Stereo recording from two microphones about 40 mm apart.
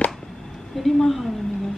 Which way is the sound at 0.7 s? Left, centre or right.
Centre.